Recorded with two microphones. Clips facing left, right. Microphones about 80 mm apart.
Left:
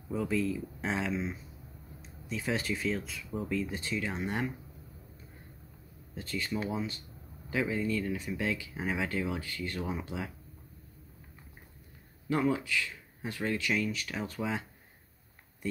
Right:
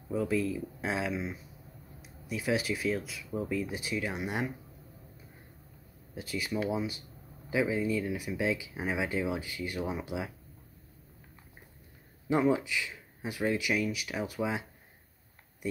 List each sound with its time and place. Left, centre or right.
0.1 s speech: centre
6.1 s speech: centre
12.3 s speech: centre